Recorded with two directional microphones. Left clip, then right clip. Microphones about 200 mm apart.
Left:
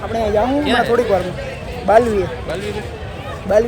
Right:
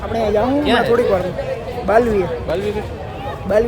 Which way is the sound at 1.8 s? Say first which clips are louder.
Left 2 dB; 5° right (ahead or behind).